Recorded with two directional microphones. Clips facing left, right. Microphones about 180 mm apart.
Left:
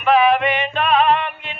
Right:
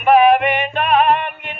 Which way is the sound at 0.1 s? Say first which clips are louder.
Right 3 dB; 45° right (ahead or behind).